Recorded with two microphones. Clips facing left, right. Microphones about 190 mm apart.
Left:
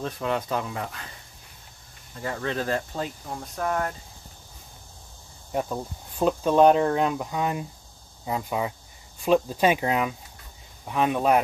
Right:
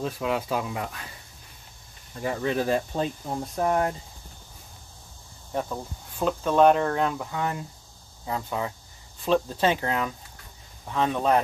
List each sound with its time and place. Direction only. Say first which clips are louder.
0.0 s speech: even; 5° right (ahead or behind)
2.1 s speech: right 3 dB; 15° right (ahead or behind)
5.5 s speech: left 2 dB; 15° left (ahead or behind)